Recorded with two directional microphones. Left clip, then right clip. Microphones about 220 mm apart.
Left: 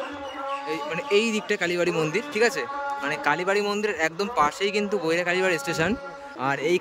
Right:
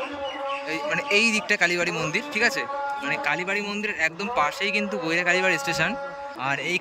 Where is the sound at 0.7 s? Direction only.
10° left (ahead or behind).